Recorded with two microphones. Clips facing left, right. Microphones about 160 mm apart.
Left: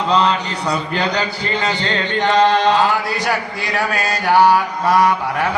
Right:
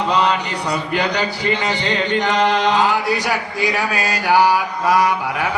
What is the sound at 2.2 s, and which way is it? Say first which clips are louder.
Speech: left 5 dB; 15° right (ahead or behind).